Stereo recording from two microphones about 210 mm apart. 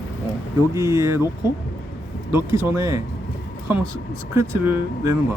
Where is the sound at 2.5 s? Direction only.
15° right (ahead or behind).